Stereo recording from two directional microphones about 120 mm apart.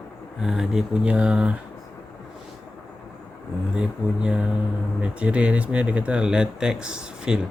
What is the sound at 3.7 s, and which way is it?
Speech, 10° right (ahead or behind).